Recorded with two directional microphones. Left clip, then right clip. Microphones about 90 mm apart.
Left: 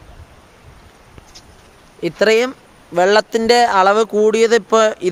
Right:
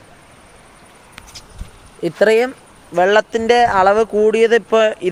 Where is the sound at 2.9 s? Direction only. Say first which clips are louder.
Even; 75° left (ahead or behind).